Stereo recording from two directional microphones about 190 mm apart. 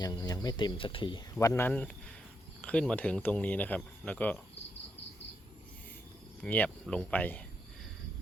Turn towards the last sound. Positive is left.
turn(degrees=10)  # may be behind; listen again after turning